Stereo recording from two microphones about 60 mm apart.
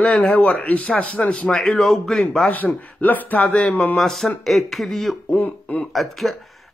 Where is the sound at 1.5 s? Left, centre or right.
Centre.